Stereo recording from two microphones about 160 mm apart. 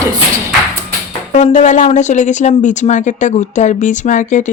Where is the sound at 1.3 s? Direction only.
50° left (ahead or behind).